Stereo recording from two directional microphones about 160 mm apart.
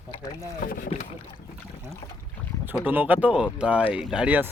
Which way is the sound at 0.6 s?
60° left (ahead or behind).